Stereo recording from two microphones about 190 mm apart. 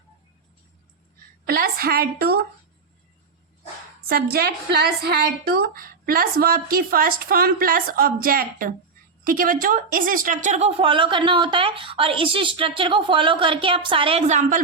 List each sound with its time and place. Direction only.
1.5 s a woman's voice: 50° right (ahead or behind)
4.1 s a woman's voice: 55° right (ahead or behind); by 14.6 s 40° right (ahead or behind)